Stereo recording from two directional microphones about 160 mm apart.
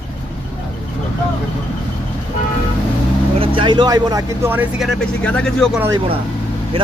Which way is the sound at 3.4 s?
35° right (ahead or behind).